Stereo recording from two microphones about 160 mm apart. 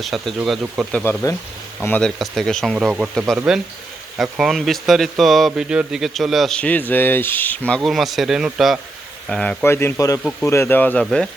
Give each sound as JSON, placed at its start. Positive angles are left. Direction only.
{"t": 0.0, "sound": "speech", "side_deg": 0}
{"t": 1.0, "sound": "speech", "side_deg": 20}
{"t": 1.8, "sound": "speech", "side_deg": 10}